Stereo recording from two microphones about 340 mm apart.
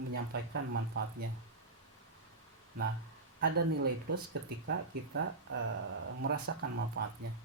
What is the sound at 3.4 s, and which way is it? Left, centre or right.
Speech, right.